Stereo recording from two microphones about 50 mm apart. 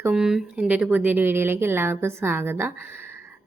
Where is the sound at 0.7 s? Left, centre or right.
Right.